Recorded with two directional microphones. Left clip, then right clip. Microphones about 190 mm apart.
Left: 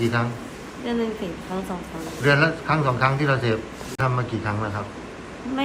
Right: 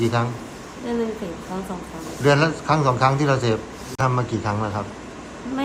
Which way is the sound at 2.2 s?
15° right (ahead or behind).